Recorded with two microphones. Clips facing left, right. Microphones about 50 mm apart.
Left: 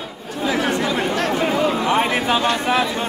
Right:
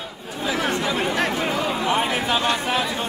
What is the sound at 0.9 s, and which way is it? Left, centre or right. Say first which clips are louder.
Chatter: left 2 dB; centre.